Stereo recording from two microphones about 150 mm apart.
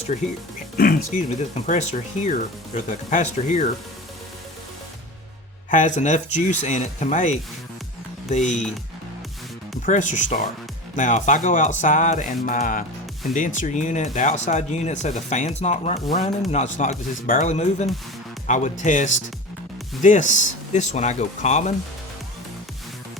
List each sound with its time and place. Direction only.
0.8 s speech: 75° left (ahead or behind)
1.3 s speech: 50° left (ahead or behind)
5.7 s speech: 55° left (ahead or behind)
9.8 s speech: 55° left (ahead or behind)